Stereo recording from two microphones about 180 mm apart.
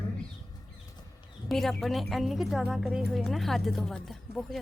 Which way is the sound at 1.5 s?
Centre (ahead or behind).